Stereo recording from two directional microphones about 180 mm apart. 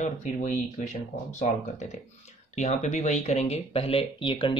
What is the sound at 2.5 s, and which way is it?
Speech, 40° left (ahead or behind).